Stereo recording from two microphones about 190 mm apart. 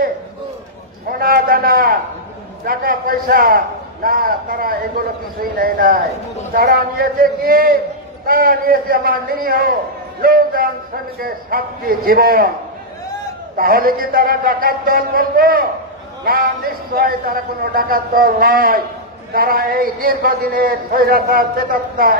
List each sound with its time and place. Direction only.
1.1 s a sound: 50° right (ahead or behind)
2.6 s a man's voice: 50° right (ahead or behind)
13.6 s a man's voice: 50° right (ahead or behind)